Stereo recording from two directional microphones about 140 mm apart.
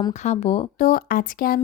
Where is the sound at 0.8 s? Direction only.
80° left.